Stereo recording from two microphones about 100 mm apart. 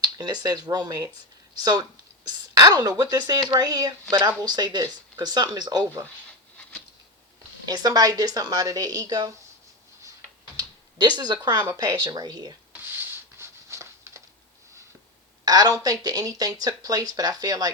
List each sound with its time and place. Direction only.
0.0 s speech: 45° right (ahead or behind)
6.6 s a sound: 15° left (ahead or behind)
7.7 s speech: 40° right (ahead or behind)
10.6 s typing: 45° right (ahead or behind)
11.2 s speech: 45° right (ahead or behind)
13.0 s a sound: 30° right (ahead or behind)
15.4 s speech: 40° right (ahead or behind)